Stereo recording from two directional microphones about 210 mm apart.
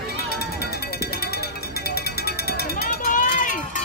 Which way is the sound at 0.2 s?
50° left (ahead or behind).